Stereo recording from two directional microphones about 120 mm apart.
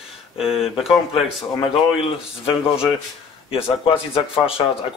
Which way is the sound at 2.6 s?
50° left (ahead or behind).